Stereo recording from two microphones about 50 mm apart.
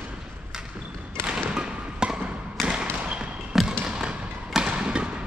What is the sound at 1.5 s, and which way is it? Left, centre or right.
Music, centre.